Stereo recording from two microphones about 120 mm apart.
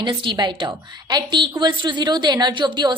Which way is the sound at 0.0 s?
40° right (ahead or behind).